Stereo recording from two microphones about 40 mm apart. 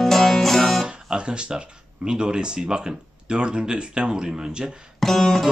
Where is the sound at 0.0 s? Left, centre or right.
Centre.